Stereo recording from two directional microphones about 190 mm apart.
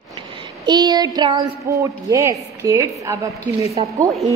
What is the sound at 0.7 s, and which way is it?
A woman's voice, 20° right (ahead or behind).